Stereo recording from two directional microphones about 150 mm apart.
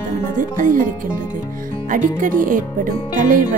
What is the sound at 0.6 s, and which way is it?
Speech, 60° right (ahead or behind).